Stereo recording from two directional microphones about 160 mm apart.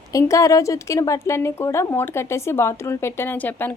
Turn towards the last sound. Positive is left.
turn(degrees=10)  # may be behind; listen again after turning